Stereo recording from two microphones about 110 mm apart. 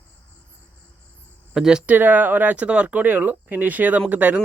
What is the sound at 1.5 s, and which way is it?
Speech, 5° right (ahead or behind).